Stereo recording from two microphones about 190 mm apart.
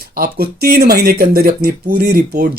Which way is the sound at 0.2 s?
55° right (ahead or behind).